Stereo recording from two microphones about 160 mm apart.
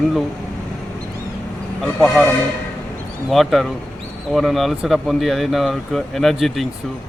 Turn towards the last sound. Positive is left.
turn(degrees=0)  # may be behind; listen again after turning